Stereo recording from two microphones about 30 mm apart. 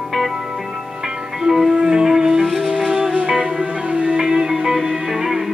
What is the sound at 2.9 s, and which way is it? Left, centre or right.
Music, centre.